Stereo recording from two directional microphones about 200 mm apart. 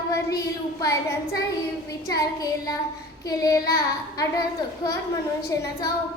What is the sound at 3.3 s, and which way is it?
Child singing, 20° left (ahead or behind).